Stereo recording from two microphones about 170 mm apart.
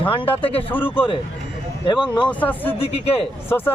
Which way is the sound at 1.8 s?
25° left (ahead or behind).